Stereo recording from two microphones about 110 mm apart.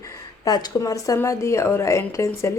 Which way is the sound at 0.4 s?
35° left (ahead or behind).